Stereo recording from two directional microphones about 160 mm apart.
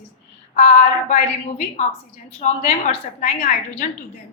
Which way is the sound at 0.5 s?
45° left (ahead or behind).